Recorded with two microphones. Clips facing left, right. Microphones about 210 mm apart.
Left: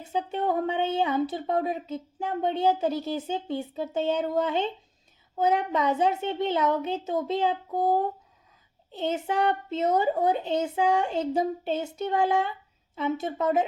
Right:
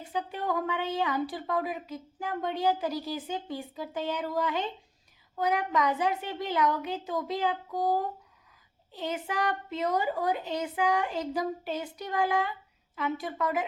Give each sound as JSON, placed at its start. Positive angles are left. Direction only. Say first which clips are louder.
{"t": 0.0, "sound": "speech", "louder": "left 5 dB", "side_deg": 25}